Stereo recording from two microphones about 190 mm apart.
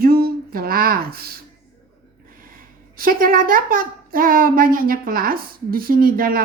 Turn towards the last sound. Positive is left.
turn(degrees=-50)  # may be behind; listen again after turning